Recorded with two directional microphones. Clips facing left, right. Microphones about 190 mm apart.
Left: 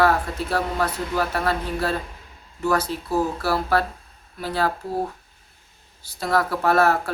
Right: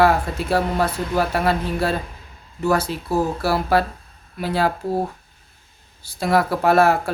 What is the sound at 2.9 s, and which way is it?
Speech, 85° right.